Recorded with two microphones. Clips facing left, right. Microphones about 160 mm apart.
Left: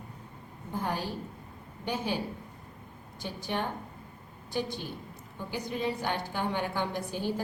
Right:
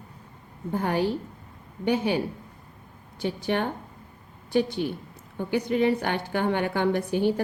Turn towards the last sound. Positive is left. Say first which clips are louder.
# right 9 dB
turn(degrees=-65)  # may be behind; listen again after turning